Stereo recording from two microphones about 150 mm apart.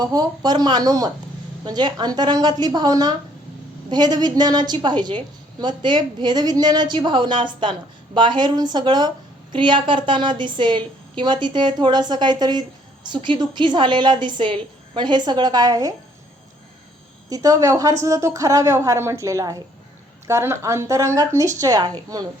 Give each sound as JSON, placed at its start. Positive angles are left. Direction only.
{"t": 0.0, "sound": "a woman's voice", "side_deg": -25}
{"t": 17.2, "sound": "a woman's voice", "side_deg": -25}